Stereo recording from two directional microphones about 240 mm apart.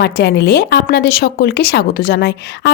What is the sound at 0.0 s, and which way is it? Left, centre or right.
Speech, left.